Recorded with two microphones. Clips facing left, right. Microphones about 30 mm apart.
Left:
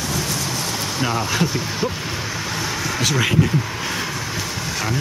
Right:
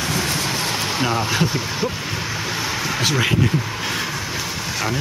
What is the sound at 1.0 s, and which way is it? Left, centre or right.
Speech, centre.